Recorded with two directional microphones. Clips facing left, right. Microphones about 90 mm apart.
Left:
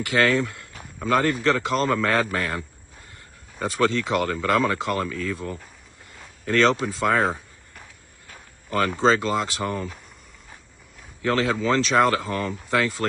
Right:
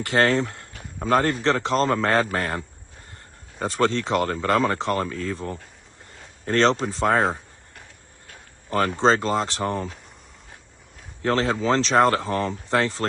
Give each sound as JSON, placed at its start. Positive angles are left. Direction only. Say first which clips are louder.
{"t": 0.0, "sound": "speech", "louder": "right 1 dB", "side_deg": -40}
{"t": 8.6, "sound": "speech", "louder": "right 1 dB", "side_deg": -40}
{"t": 11.2, "sound": "speech", "louder": "right 1 dB", "side_deg": -35}